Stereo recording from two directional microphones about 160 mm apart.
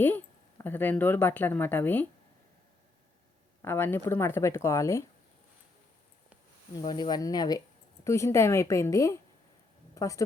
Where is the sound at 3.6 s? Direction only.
15° left (ahead or behind).